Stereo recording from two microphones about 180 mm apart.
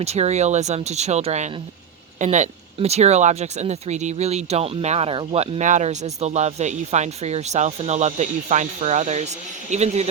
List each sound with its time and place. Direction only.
0.0 s speech: 35° right (ahead or behind)